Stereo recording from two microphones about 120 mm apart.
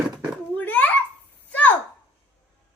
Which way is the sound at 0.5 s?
15° left (ahead or behind).